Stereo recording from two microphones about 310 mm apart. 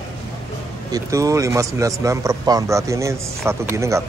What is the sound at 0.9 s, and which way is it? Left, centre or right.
A man's voice, centre.